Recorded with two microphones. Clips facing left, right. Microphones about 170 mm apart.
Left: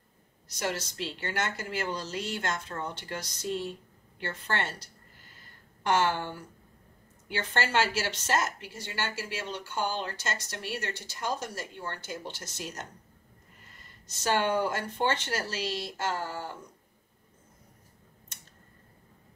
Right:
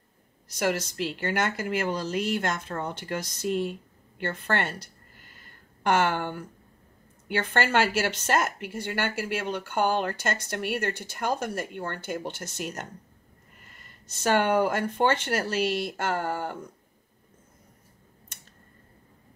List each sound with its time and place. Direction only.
0.6 s a woman's voice: 55° right (ahead or behind)
5.9 s a woman's voice: 55° right (ahead or behind)
14.0 s a woman's voice: 60° right (ahead or behind)